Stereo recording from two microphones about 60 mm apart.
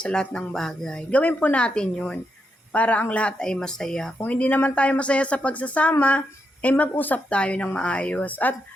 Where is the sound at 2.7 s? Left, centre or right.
Left.